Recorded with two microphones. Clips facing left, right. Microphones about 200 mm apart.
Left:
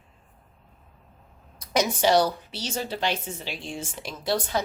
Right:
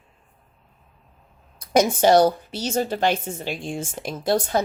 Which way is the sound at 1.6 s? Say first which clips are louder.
Right 6 dB; 50° right (ahead or behind).